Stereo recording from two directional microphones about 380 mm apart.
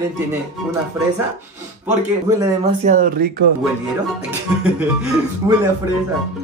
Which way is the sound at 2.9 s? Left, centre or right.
Right.